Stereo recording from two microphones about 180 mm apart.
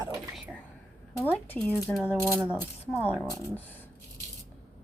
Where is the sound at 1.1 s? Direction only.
10° left (ahead or behind).